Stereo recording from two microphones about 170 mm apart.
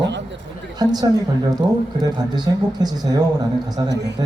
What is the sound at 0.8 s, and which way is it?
Speech, 20° right (ahead or behind).